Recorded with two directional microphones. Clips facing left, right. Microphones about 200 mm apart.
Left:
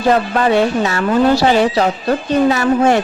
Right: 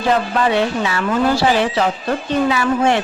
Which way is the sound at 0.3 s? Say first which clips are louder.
Left 3 dB; 45° left (ahead or behind).